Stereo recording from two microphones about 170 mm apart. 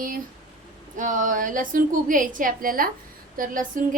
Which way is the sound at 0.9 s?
50° right (ahead or behind).